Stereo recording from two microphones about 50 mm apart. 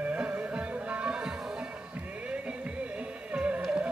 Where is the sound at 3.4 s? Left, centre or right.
Right.